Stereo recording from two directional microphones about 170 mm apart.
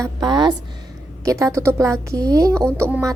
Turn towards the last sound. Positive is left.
turn(degrees=-15)  # may be behind; listen again after turning